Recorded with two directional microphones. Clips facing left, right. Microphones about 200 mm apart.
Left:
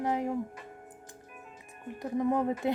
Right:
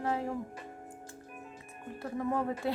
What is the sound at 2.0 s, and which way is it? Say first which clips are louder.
Speech: left 4 dB; 20° left (ahead or behind).